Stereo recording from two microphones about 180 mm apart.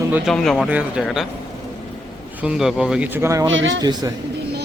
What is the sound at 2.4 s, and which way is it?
Speech, 5° right (ahead or behind).